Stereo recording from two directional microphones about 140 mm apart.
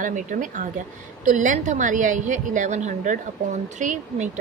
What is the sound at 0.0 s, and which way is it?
A woman's voice, 65° right (ahead or behind).